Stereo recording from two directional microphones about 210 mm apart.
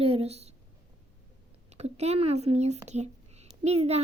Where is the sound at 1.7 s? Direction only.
30° right (ahead or behind).